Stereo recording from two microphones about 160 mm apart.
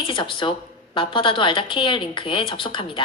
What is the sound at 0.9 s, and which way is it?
Speech, 35° left (ahead or behind).